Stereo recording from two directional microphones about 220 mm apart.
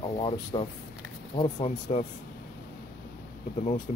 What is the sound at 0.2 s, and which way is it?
Speech, 25° left (ahead or behind).